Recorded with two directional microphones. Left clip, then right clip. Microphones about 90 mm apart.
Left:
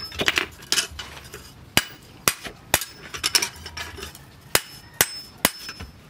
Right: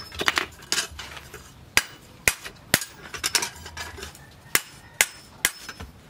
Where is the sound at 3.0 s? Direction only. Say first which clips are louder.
Left 3 dB; 5° right (ahead or behind).